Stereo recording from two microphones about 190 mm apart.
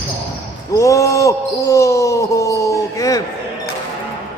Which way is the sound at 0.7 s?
15° left (ahead or behind).